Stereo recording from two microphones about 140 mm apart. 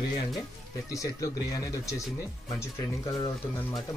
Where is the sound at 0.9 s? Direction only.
25° left (ahead or behind).